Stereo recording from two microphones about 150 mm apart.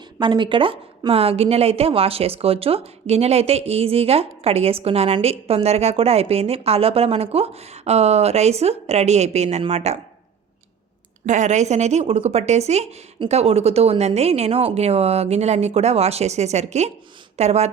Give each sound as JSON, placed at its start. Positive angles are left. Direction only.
{"t": 0.2, "sound": "a woman's voice", "side_deg": -30}
{"t": 11.3, "sound": "a woman's voice", "side_deg": -55}